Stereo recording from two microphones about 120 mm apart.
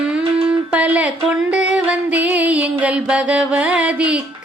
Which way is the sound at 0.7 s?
10° right (ahead or behind).